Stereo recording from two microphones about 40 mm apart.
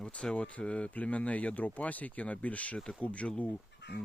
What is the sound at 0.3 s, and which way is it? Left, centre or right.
Speech, left.